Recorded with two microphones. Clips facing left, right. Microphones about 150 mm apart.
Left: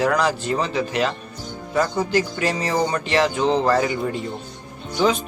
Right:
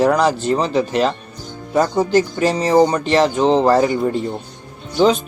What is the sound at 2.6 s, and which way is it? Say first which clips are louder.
Speech: right 10 dB; 25° right (ahead or behind).